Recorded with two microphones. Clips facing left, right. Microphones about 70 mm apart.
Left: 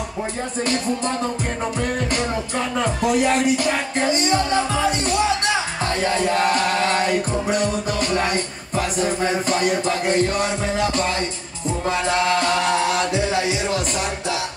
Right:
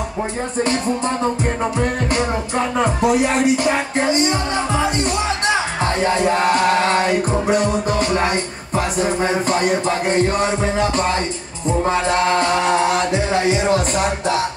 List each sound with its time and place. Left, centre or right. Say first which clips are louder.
0.7 s music: right 1 dB; right